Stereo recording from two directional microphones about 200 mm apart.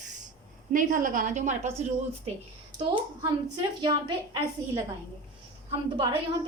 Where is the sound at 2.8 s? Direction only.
25° right (ahead or behind).